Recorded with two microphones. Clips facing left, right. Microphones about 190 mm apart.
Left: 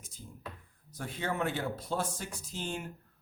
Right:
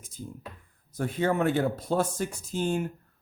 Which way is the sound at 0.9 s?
50° right (ahead or behind).